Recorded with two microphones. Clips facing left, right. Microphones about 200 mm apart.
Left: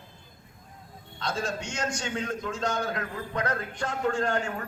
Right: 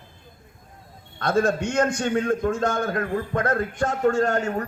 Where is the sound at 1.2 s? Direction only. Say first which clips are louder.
Right 10 dB; 55° right (ahead or behind).